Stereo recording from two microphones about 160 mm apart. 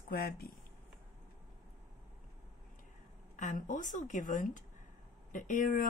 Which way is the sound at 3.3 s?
50° left (ahead or behind).